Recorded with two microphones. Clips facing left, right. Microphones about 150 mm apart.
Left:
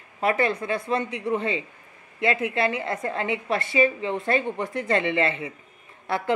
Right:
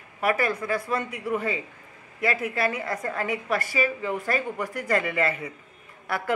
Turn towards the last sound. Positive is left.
turn(degrees=25)  # may be behind; listen again after turning